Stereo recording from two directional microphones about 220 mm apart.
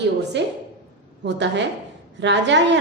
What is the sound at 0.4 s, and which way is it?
A woman's voice, 50° right (ahead or behind).